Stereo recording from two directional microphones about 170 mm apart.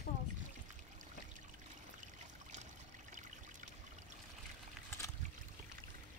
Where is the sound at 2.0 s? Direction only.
45° right (ahead or behind).